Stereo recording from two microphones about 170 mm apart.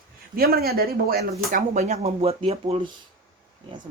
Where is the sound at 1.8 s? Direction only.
40° right (ahead or behind).